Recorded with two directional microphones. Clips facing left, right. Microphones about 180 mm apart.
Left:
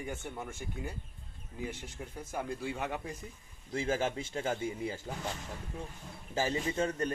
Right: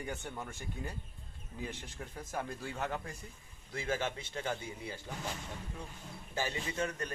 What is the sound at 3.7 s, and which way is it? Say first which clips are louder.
Speech: left 4 dB; 25° left (ahead or behind).